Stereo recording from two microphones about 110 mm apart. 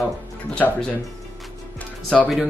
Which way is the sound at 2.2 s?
5° right (ahead or behind).